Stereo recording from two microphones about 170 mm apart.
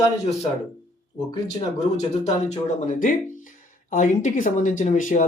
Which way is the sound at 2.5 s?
45° left (ahead or behind).